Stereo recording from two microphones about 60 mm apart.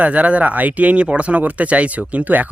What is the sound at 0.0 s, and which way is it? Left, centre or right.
Speech, right.